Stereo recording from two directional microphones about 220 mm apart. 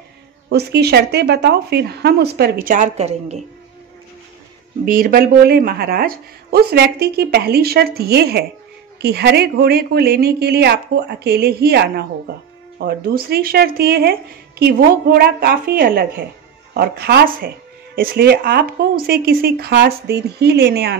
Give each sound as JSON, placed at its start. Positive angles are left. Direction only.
{"t": 0.5, "sound": "speech", "side_deg": -45}
{"t": 4.8, "sound": "speech", "side_deg": -40}